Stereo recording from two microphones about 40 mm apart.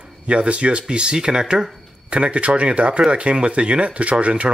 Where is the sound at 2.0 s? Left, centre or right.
Right.